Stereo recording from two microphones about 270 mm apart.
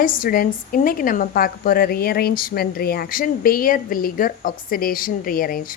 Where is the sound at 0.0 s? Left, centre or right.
Left.